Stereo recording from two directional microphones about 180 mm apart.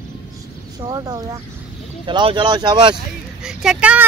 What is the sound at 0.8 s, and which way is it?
Speech, 20° right (ahead or behind).